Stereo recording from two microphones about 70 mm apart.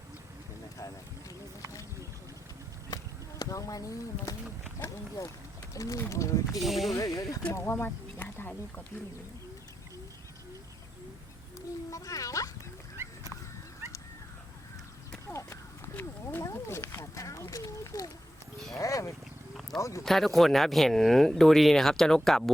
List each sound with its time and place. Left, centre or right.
2.9 s a sound: left
5.7 s speech: left
6.5 s speech: centre
6.9 s speech: left
7.6 s speech: left
11.9 s a child's voice: left
15.3 s horse: left
16.4 s speech: left
19.7 s speech: centre